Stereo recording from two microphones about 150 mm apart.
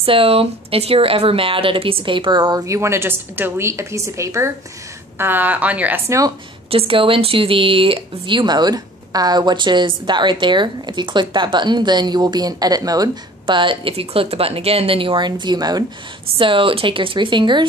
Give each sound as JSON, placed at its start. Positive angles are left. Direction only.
{"t": 0.0, "sound": "speech", "side_deg": -40}
{"t": 6.7, "sound": "speech", "side_deg": -40}